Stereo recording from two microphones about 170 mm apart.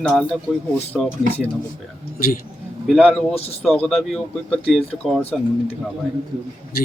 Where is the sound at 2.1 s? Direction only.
60° left (ahead or behind).